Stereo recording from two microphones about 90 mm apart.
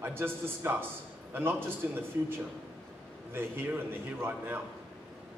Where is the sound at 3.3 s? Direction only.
25° right (ahead or behind).